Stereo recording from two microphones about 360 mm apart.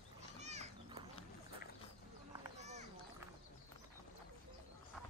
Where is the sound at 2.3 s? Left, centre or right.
Centre.